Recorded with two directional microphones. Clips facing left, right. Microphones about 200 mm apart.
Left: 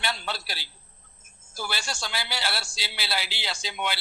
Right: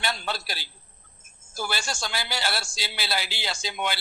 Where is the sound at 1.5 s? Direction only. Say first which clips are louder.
Right 3 dB; 45° right (ahead or behind).